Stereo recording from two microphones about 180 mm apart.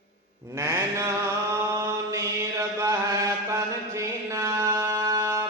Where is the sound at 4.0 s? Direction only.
15° right (ahead or behind).